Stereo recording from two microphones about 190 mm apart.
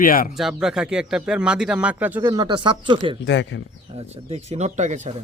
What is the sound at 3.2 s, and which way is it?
Speech, 70° left (ahead or behind).